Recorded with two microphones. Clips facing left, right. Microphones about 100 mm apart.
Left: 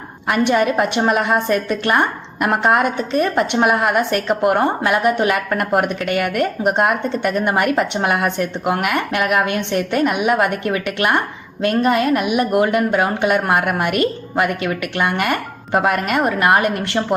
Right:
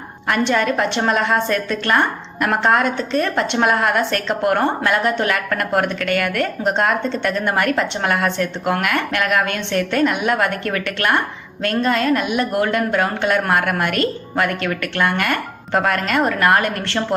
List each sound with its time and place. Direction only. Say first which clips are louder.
0.3 s a woman's voice: left 2 dB; 15° left (ahead or behind)